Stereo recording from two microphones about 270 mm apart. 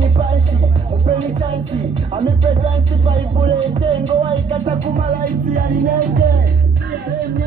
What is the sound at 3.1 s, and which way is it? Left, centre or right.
Music, centre.